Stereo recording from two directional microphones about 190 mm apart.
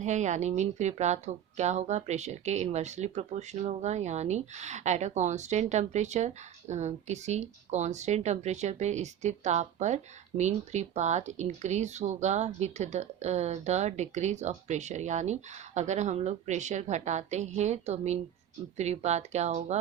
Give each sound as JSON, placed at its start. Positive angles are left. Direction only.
{"t": 0.0, "sound": "a woman's voice", "side_deg": -40}